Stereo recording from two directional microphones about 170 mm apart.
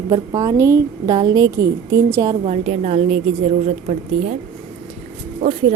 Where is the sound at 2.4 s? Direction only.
40° right (ahead or behind).